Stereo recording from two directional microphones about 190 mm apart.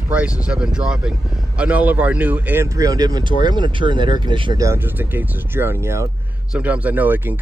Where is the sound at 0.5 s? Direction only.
5° right (ahead or behind).